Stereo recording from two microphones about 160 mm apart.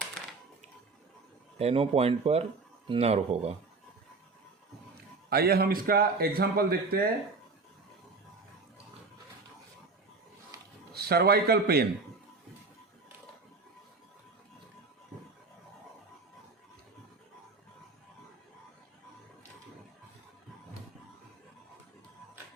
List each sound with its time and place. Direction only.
1.5 s speech: 40° right (ahead or behind)
5.3 s a man's voice: 75° right (ahead or behind)
10.9 s speech: 80° right